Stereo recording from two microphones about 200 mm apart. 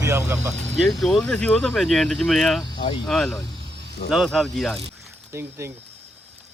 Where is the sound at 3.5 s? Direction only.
60° right (ahead or behind).